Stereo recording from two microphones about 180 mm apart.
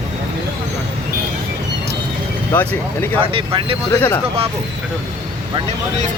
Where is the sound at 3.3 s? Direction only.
30° right (ahead or behind).